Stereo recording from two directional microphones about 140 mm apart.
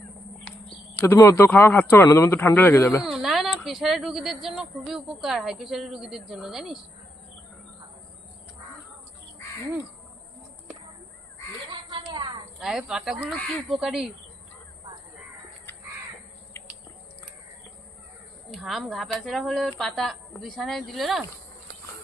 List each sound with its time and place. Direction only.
1.0 s speech: 15° left (ahead or behind)
3.0 s a woman's voice: 5° right (ahead or behind)
11.7 s a sound: 30° right (ahead or behind)
12.5 s speech: 5° right (ahead or behind)
18.5 s speech: centre (ahead or behind)